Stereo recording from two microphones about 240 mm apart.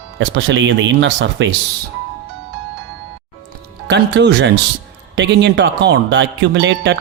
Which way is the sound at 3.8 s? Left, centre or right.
Right.